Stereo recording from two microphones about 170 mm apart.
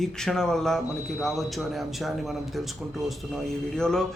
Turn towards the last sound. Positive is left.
turn(degrees=5)  # may be behind; listen again after turning